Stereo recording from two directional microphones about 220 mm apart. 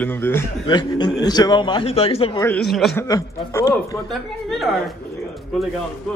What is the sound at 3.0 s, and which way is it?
Speech, 15° left (ahead or behind).